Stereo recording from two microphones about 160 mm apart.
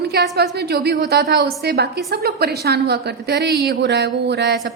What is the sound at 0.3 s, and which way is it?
A woman's voice, 90° right.